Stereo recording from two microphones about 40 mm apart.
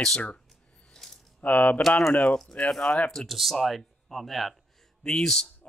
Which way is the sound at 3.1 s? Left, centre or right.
Centre.